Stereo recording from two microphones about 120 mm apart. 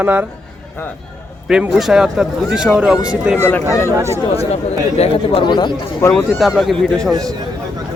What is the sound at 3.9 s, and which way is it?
Speech, 25° right (ahead or behind).